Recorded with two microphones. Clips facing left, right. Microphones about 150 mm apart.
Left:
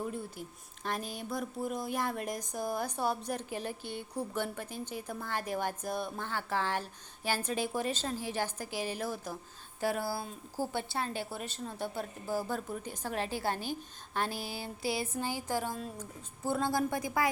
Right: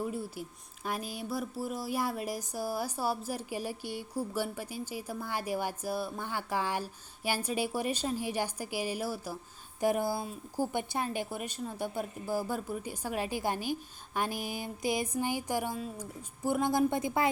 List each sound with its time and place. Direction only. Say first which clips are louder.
0.0 s a woman's voice: right 2 dB; 5° right (ahead or behind); by 17.2 s 25° right (ahead or behind)